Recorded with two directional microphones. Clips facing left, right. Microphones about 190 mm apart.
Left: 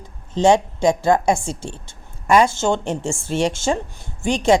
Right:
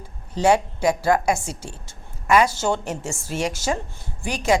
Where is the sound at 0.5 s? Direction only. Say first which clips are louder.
Left 3 dB; 25° left (ahead or behind).